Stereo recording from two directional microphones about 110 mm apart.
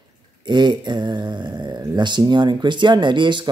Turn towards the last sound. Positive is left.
turn(degrees=-45)  # may be behind; listen again after turning